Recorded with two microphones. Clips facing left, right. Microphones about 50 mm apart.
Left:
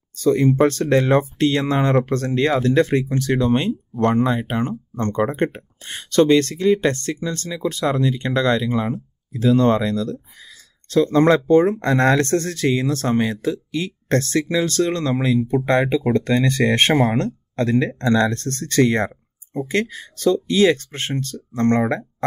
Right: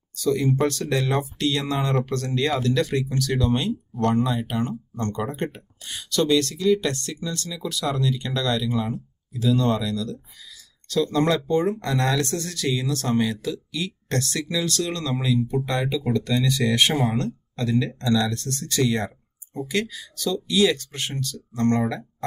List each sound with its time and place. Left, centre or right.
0.1 s speech: left